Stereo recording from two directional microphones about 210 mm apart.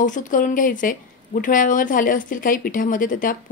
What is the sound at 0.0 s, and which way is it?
Speech, 40° left (ahead or behind).